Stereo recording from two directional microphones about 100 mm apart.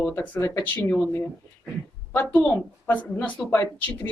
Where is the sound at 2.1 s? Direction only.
15° left (ahead or behind).